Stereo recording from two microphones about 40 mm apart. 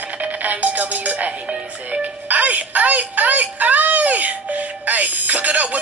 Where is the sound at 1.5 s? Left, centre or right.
Right.